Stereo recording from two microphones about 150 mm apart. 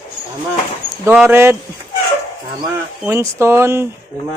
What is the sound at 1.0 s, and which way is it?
Speech, 15° right (ahead or behind).